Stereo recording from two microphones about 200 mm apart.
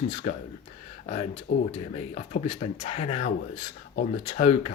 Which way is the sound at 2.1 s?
35° left (ahead or behind).